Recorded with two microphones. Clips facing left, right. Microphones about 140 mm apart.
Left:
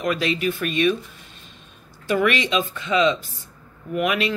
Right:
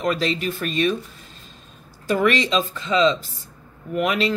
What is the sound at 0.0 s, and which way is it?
Speech, 35° right (ahead or behind).